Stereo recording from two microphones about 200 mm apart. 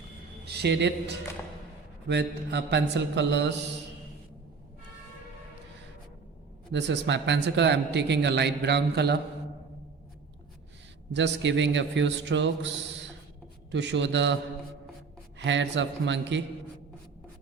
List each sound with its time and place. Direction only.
0.4 s a man's voice: 55° right (ahead or behind)
6.7 s a man's voice: 60° right (ahead or behind)
11.1 s a man's voice: 65° right (ahead or behind)
15.4 s a man's voice: 65° right (ahead or behind)